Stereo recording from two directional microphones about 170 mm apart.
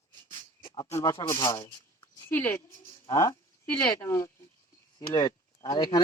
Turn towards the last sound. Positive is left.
turn(degrees=25)  # may be behind; listen again after turning